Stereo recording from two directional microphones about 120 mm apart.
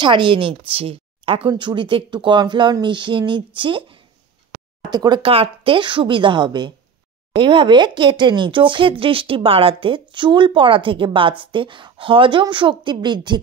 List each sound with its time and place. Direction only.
0.0 s speech: 40° right (ahead or behind)
5.2 s speech: 50° right (ahead or behind)